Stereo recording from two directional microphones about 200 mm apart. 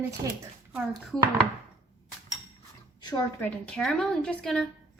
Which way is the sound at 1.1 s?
5° left (ahead or behind).